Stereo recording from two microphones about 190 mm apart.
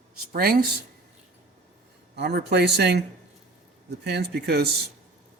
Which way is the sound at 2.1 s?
60° right (ahead or behind).